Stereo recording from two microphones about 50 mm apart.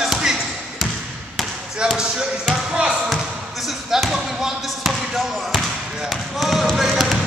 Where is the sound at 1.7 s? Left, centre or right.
Centre.